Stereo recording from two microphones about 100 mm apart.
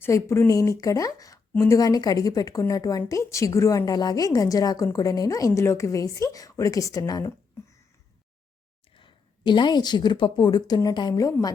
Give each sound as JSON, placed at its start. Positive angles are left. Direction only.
{"t": 0.0, "sound": "a woman's voice", "side_deg": 30}
{"t": 9.0, "sound": "a woman's voice", "side_deg": 55}
{"t": 11.1, "sound": "a woman's voice", "side_deg": 35}